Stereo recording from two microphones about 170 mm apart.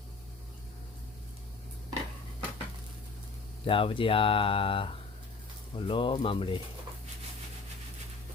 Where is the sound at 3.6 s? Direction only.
30° left (ahead or behind).